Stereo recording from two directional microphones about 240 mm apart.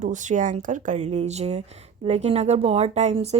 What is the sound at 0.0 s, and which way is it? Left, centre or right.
Speech, right.